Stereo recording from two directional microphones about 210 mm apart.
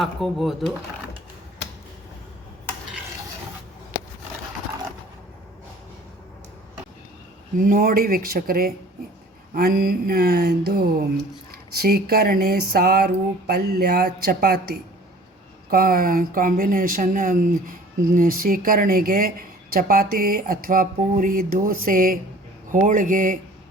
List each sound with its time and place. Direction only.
0.0 s speech: centre (ahead or behind)
7.6 s speech: 40° right (ahead or behind)